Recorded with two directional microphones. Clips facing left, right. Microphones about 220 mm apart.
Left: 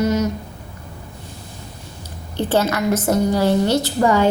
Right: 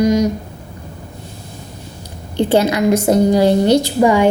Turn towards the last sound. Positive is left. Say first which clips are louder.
# right 4 dB
turn(degrees=-15)  # may be behind; listen again after turning